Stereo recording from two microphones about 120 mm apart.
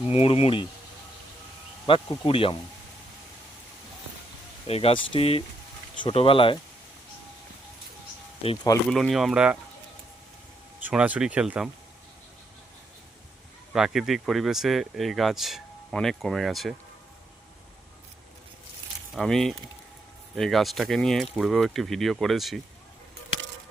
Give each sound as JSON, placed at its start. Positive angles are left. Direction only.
{"t": 0.1, "sound": "speech", "side_deg": 55}
{"t": 2.2, "sound": "speech", "side_deg": 50}
{"t": 4.6, "sound": "speech", "side_deg": 55}
{"t": 8.9, "sound": "speech", "side_deg": 0}
{"t": 10.8, "sound": "speech", "side_deg": -10}
{"t": 13.7, "sound": "speech", "side_deg": -5}
{"t": 19.1, "sound": "speech", "side_deg": 0}